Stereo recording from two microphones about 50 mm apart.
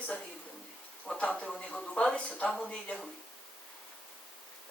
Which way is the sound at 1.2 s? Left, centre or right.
Left.